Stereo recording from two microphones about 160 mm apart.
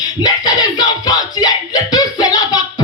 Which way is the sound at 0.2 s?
25° left (ahead or behind).